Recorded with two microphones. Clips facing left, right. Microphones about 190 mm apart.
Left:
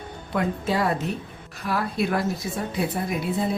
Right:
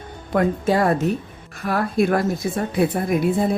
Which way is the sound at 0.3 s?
50° right (ahead or behind).